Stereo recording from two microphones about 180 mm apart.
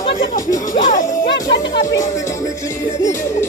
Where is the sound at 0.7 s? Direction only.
45° left (ahead or behind).